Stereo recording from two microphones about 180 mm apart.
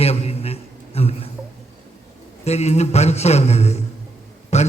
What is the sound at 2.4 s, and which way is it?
A man's voice, 35° left (ahead or behind).